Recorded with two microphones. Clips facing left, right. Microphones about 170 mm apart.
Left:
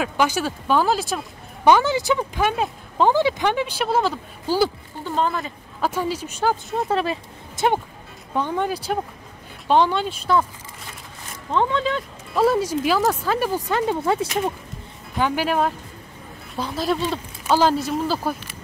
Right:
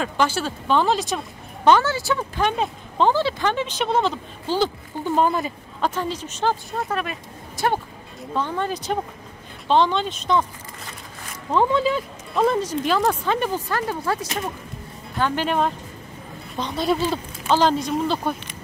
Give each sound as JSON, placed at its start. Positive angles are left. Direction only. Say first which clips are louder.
{"t": 0.0, "sound": "speech", "louder": "left 1 dB", "side_deg": 10}
{"t": 3.1, "sound": "speech", "louder": "left 3 dB", "side_deg": 15}
{"t": 5.0, "sound": "speech", "louder": "right 3 dB", "side_deg": -15}
{"t": 5.8, "sound": "speech", "louder": "left 1 dB", "side_deg": 10}
{"t": 6.9, "sound": "speech", "louder": "left 5 dB", "side_deg": 30}
{"t": 11.5, "sound": "speech", "louder": "right 2 dB", "side_deg": -5}
{"t": 12.4, "sound": "speech", "louder": "left 2 dB", "side_deg": 10}
{"t": 13.7, "sound": "speech", "louder": "left 4 dB", "side_deg": 20}
{"t": 15.1, "sound": "speech", "louder": "left 1 dB", "side_deg": 10}